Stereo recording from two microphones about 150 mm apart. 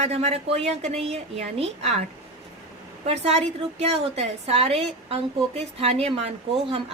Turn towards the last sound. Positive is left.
turn(degrees=-40)  # may be behind; listen again after turning